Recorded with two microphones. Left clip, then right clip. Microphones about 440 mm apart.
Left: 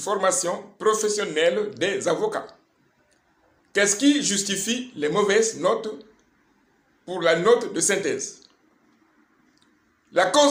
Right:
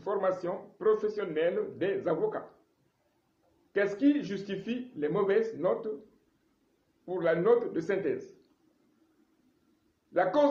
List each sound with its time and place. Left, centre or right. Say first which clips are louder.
0.0 s speech: left 7 dB; right
3.7 s speech: left 7 dB; right
7.0 s speech: left 7 dB; right
10.1 s a man's voice: left 8 dB; right